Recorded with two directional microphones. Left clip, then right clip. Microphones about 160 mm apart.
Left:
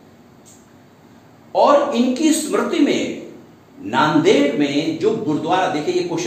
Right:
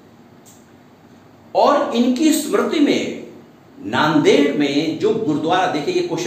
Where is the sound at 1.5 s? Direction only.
Centre (ahead or behind).